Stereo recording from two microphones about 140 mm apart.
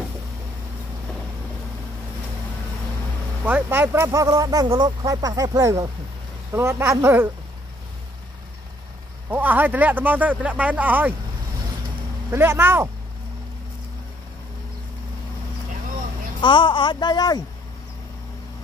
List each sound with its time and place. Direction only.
3.4 s speech: 15° right (ahead or behind)
9.3 s speech: 15° right (ahead or behind)
12.3 s speech: 15° right (ahead or behind)
16.3 s a woman's voice: 35° left (ahead or behind)